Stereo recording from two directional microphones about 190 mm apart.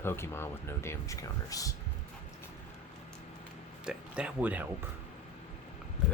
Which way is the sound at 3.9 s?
5° right (ahead or behind).